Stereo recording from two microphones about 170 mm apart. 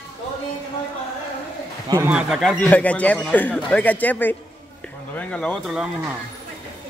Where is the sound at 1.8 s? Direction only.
20° right (ahead or behind).